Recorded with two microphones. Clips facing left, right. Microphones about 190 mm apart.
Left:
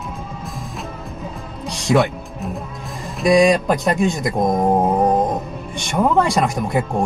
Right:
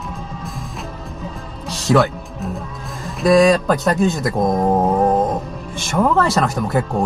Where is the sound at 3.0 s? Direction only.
Centre (ahead or behind).